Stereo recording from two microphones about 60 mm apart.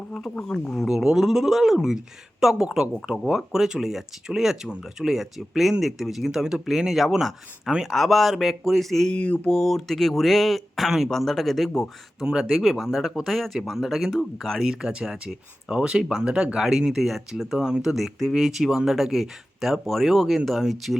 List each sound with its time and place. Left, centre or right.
0.3 s speech: centre
0.9 s speech: centre
2.6 s speech: centre
3.1 s speech: centre
9.1 s mantra: centre
9.5 s speech: centre
17.9 s speech: centre